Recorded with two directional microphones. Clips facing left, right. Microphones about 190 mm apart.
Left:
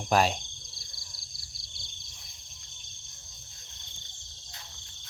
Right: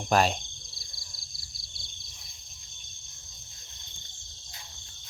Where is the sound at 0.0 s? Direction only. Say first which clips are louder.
Right 1 dB; 5° left (ahead or behind).